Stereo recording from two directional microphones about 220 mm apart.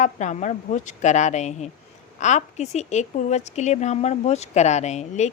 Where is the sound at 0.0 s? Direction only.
35° left (ahead or behind).